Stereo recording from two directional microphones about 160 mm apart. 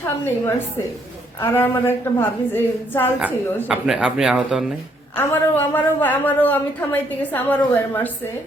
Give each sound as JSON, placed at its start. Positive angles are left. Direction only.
{"t": 1.4, "sound": "a woman's voice", "side_deg": 15}
{"t": 3.2, "sound": "speech", "side_deg": -5}
{"t": 5.1, "sound": "a woman's voice", "side_deg": 10}